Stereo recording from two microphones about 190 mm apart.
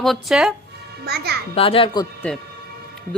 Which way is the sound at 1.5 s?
30° left (ahead or behind).